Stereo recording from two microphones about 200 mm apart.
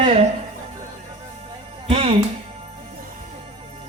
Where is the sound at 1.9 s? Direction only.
30° right (ahead or behind).